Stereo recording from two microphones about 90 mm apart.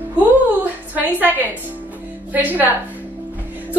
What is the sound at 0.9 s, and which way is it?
A woman's voice, 20° right (ahead or behind).